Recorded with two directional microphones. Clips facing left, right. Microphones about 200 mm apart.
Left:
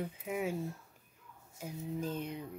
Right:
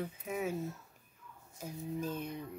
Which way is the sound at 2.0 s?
10° right (ahead or behind).